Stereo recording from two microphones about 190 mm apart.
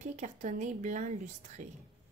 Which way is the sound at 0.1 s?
40° right (ahead or behind).